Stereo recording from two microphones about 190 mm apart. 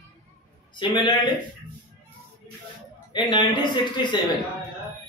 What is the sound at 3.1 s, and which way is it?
A man's voice, 25° left (ahead or behind).